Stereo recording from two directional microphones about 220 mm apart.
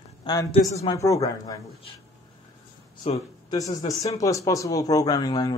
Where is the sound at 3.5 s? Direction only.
15° left (ahead or behind).